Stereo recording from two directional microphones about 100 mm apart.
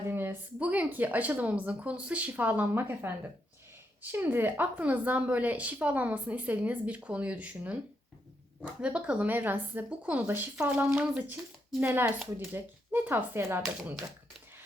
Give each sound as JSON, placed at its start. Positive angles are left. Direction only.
{"t": 0.0, "sound": "speech", "side_deg": -25}